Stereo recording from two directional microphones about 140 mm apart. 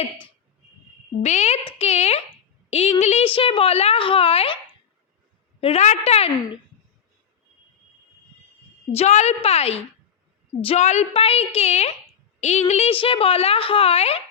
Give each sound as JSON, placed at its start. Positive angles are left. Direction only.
{"t": 1.2, "sound": "a woman's voice", "side_deg": 55}
{"t": 8.9, "sound": "a woman's voice", "side_deg": 50}